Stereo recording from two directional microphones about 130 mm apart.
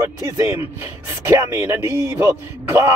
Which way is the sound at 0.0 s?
20° right (ahead or behind).